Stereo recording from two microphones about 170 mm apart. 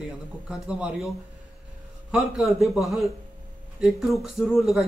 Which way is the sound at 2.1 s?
Centre (ahead or behind).